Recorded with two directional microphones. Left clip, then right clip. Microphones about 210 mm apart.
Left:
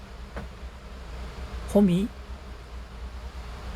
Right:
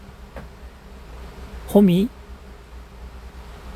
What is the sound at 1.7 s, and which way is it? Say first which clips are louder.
Speech: right 6 dB; 50° right (ahead or behind).